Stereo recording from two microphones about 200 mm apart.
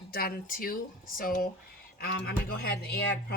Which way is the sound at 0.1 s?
45° left (ahead or behind).